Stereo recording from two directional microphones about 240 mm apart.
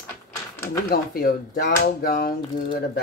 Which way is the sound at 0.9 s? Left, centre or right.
Left.